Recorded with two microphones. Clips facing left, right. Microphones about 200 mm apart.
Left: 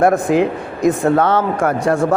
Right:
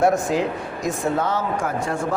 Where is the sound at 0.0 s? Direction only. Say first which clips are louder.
Left 6 dB; 60° left (ahead or behind).